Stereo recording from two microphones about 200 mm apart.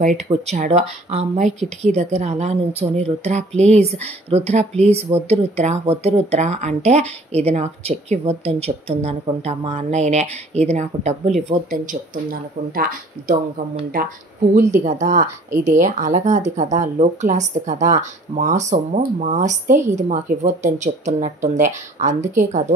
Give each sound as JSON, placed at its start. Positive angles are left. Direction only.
{"t": 0.0, "sound": "speech", "side_deg": -35}
{"t": 14.8, "sound": "speech", "side_deg": -35}